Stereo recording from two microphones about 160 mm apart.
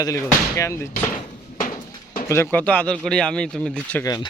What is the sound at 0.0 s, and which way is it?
Speech, 20° left (ahead or behind).